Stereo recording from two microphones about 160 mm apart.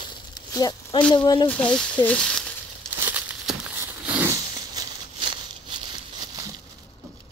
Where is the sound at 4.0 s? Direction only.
10° right (ahead or behind).